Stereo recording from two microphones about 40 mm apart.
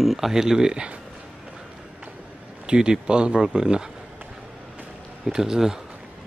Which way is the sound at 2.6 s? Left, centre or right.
Right.